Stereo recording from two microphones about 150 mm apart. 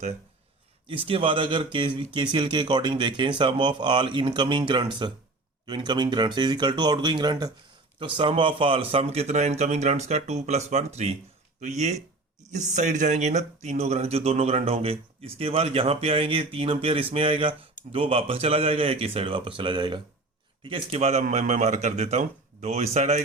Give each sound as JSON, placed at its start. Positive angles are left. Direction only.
{"t": 0.9, "sound": "speech", "side_deg": -35}